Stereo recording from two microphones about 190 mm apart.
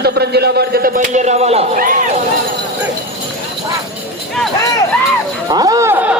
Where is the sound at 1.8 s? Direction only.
45° right (ahead or behind).